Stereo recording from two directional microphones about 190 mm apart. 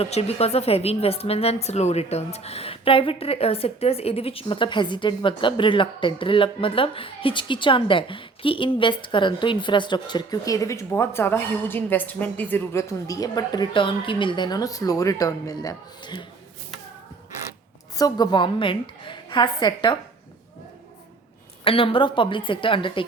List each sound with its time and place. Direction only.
0.0 s speech: 30° left (ahead or behind)
17.9 s speech: 20° left (ahead or behind)
21.6 s speech: 30° left (ahead or behind)